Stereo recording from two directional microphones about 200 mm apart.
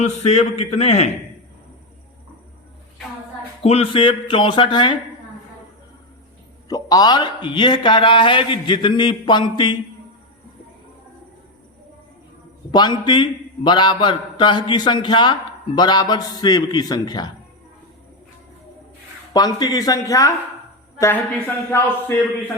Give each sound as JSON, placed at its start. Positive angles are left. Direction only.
{"t": 0.0, "sound": "a man's voice", "side_deg": 35}
{"t": 3.6, "sound": "a man's voice", "side_deg": 30}
{"t": 6.7, "sound": "a man's voice", "side_deg": 20}
{"t": 12.7, "sound": "a man's voice", "side_deg": 20}
{"t": 19.3, "sound": "a man's voice", "side_deg": 20}